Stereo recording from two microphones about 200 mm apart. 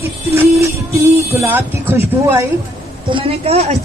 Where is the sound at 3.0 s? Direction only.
25° right (ahead or behind).